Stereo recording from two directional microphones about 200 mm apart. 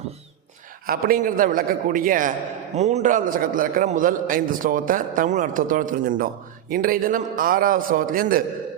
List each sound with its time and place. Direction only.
0.9 s a man's voice: 45° right (ahead or behind)